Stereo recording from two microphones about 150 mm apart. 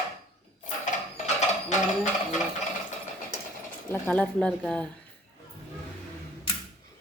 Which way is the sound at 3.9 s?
10° left (ahead or behind).